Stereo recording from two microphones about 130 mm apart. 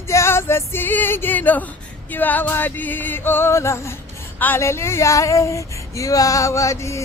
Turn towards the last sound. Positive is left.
turn(degrees=25)  # may be behind; listen again after turning